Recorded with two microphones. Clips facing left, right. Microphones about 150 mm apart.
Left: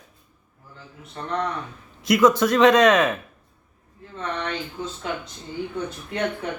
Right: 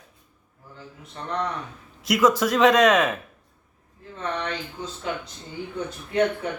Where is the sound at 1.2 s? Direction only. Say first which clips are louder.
Left 2 dB; centre (ahead or behind).